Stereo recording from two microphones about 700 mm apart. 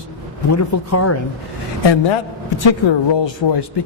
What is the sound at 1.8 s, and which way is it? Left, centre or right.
Speech, left.